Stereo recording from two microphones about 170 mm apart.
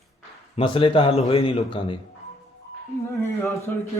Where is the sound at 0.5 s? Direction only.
30° left (ahead or behind).